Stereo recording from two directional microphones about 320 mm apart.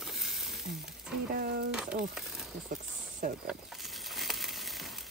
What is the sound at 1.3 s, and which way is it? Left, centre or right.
Speech, right.